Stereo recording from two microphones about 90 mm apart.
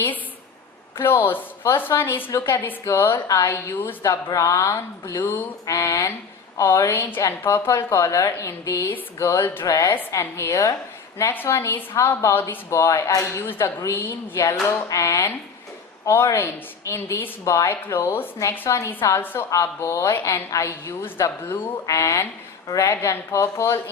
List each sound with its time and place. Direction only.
0.9 s a woman's voice: 25° left (ahead or behind)
5.6 s a woman's voice: 35° left (ahead or behind)
18.7 s a woman's voice: 40° left (ahead or behind)
19.2 s a woman's voice: 25° left (ahead or behind)
19.5 s a woman's voice: 35° left (ahead or behind)
21.8 s a woman's voice: 35° left (ahead or behind)